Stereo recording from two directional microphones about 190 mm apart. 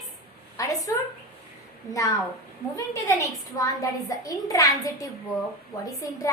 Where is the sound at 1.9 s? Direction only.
15° left (ahead or behind).